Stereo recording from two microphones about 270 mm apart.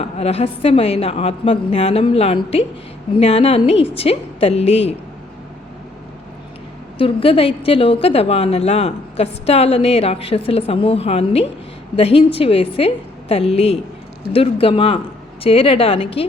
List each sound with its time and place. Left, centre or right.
0.0 s a woman's voice: left
7.0 s a woman's voice: centre